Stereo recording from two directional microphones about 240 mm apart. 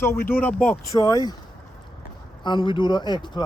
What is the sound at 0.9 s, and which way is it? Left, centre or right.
Speech, centre.